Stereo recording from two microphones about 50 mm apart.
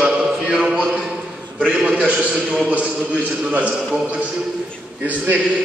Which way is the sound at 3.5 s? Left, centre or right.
Right.